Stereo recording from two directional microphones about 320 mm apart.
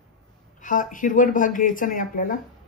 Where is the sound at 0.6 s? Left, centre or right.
Left.